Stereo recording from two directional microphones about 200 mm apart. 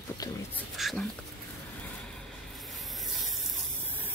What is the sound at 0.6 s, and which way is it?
Speech, centre (ahead or behind).